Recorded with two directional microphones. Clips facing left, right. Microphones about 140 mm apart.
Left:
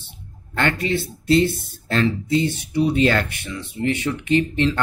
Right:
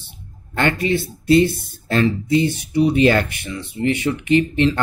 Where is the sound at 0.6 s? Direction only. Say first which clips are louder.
Right 3 dB; 15° right (ahead or behind).